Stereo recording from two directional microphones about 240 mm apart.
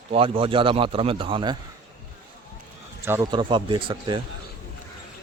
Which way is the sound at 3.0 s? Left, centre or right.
Centre.